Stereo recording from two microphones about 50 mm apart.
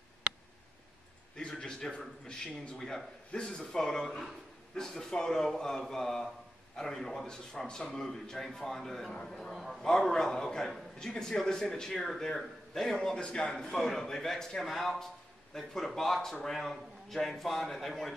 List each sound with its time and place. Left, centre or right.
1.5 s a man's voice: centre
9.8 s a man's voice: centre